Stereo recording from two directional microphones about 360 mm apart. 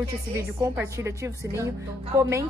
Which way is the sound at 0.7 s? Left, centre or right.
Centre.